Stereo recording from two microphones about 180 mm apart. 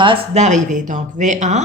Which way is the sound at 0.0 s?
30° right (ahead or behind).